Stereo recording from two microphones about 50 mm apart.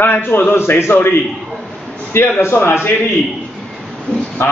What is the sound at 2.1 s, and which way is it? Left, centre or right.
Speech, left.